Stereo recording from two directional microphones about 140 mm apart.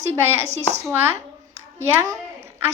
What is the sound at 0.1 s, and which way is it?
A woman's voice, 20° right (ahead or behind).